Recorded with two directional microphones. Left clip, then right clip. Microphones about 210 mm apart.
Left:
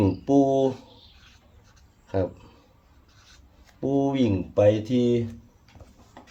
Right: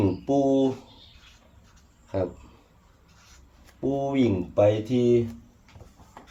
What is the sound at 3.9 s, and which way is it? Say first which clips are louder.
Speech: left 1 dB; 50° left (ahead or behind).